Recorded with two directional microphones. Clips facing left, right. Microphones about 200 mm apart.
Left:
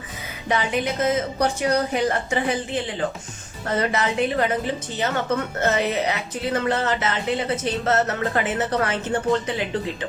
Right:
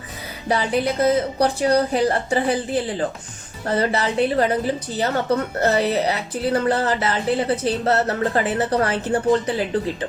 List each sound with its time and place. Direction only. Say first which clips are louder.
0.4 s speech: right 3 dB; 35° right (ahead or behind)